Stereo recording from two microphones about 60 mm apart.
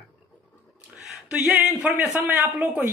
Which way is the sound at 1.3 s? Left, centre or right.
Right.